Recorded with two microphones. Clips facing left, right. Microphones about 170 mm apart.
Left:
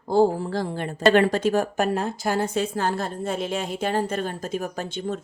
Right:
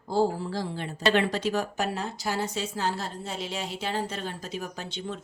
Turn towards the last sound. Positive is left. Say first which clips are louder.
# left 7 dB
turn(degrees=50)  # may be behind; listen again after turning